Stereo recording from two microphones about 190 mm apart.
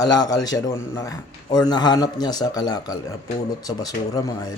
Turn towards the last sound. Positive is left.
turn(degrees=20)  # may be behind; listen again after turning